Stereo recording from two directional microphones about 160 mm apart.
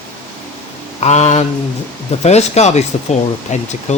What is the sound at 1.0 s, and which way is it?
Speech, 45° left (ahead or behind).